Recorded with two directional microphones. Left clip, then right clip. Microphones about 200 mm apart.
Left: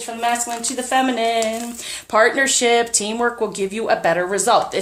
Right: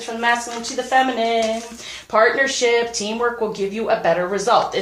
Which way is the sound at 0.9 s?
50° left (ahead or behind).